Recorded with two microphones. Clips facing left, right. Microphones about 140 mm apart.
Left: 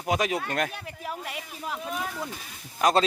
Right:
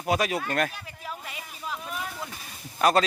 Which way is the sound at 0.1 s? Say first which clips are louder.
Right 1 dB; 20° left (ahead or behind).